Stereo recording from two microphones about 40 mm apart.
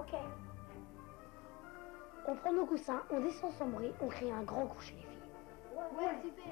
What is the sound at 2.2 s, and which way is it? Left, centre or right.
A woman's voice, centre.